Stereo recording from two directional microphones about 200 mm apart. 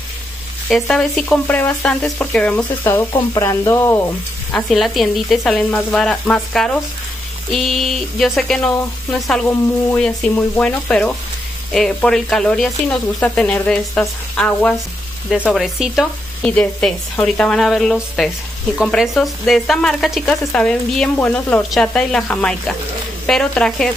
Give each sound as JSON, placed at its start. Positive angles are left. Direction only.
{"t": 0.7, "sound": "speech", "side_deg": 0}
{"t": 3.1, "sound": "speech", "side_deg": 25}
{"t": 3.4, "sound": "speech", "side_deg": 10}